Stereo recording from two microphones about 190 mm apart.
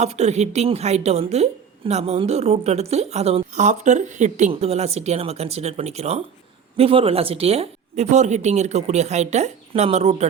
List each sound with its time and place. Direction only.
0.0 s a woman's voice: 35° right (ahead or behind)